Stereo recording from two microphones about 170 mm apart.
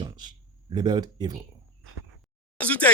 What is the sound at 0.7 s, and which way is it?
Speech, 25° right (ahead or behind).